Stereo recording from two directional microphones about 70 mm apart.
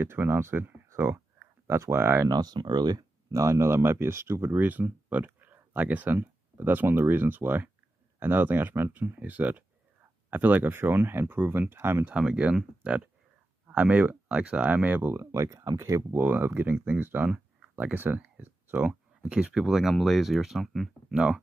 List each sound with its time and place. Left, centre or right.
0.0 s speech: right
0.8 s a sound: right
1.8 s speech: right
2.2 s speech: right
3.3 s speech: right
12.1 s speech: centre
15.1 s speech: right
16.2 s speech: right
17.3 s a sound: centre
17.9 s speech: right
18.4 s a sound: right
18.9 s a sound: centre
19.5 s speech: centre
21.1 s speech: centre